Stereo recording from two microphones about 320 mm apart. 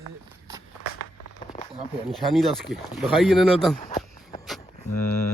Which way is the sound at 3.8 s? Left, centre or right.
Centre.